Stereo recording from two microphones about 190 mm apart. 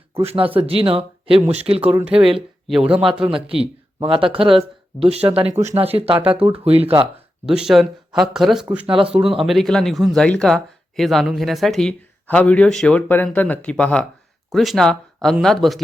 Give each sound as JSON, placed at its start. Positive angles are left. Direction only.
{"t": 0.1, "sound": "speech", "side_deg": -30}
{"t": 1.9, "sound": "speech", "side_deg": -5}
{"t": 3.4, "sound": "speech", "side_deg": -30}
{"t": 7.0, "sound": "speech", "side_deg": -5}
{"t": 8.9, "sound": "speech", "side_deg": -25}
{"t": 9.1, "sound": "speech", "side_deg": 0}